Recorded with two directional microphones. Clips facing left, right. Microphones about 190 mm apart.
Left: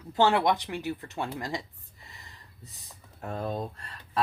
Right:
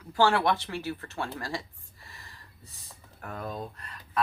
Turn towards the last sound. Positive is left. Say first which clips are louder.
# left 1 dB
turn(degrees=30)  # may be behind; listen again after turning